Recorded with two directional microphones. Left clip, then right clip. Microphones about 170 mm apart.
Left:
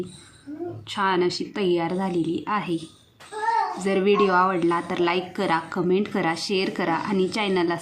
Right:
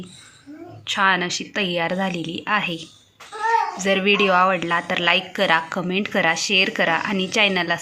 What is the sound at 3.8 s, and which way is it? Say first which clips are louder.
A woman's voice: right 2 dB; 10° right (ahead or behind).